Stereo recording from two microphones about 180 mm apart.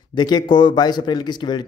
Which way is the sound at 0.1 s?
25° left (ahead or behind).